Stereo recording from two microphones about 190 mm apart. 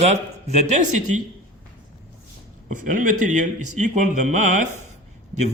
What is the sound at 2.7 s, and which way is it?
Speech, 45° right (ahead or behind).